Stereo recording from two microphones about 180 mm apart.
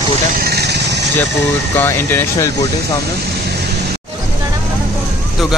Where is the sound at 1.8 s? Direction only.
10° left (ahead or behind).